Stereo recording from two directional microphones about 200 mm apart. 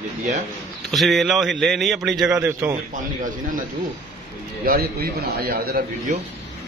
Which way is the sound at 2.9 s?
40° right (ahead or behind).